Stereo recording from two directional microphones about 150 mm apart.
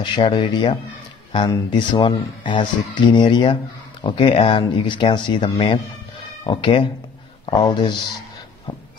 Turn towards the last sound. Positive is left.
turn(degrees=30)  # may be behind; listen again after turning